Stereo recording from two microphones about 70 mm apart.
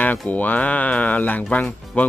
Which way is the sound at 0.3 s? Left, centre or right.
Left.